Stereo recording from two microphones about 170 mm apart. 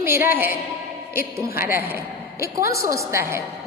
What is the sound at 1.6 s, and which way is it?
A woman's voice, 15° right (ahead or behind).